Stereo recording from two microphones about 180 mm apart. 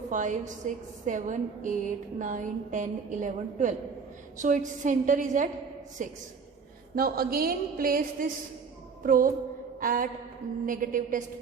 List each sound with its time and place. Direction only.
0.1 s a woman's voice: 45° right (ahead or behind)
6.9 s a woman's voice: 55° right (ahead or behind)